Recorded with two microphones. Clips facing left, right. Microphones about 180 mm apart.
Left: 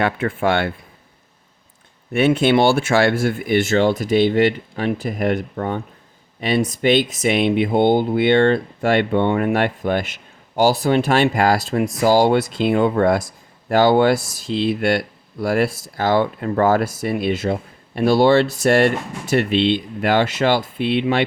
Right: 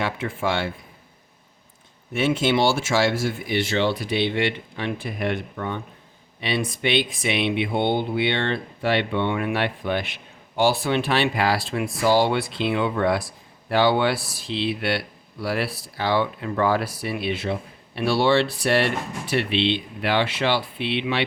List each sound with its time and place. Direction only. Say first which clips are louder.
0.0 s speech: left 6 dB; 55° left (ahead or behind)
2.1 s speech: left 6 dB; 60° left (ahead or behind)